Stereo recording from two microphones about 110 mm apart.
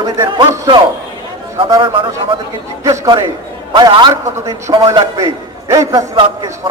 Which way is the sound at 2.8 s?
30° right (ahead or behind).